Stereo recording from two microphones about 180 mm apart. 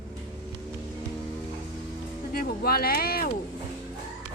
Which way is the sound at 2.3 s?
55° left (ahead or behind).